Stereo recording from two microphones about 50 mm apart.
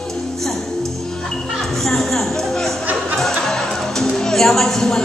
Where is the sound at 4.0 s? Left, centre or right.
Centre.